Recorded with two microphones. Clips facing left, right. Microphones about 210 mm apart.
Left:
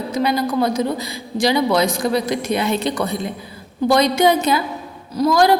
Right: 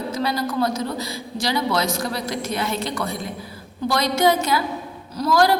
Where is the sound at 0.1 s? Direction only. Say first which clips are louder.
Left 7 dB; 15° left (ahead or behind).